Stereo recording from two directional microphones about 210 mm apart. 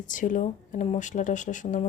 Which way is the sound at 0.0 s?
40° left (ahead or behind).